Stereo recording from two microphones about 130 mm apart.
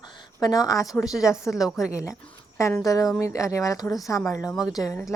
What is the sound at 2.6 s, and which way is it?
Speech, 25° left (ahead or behind).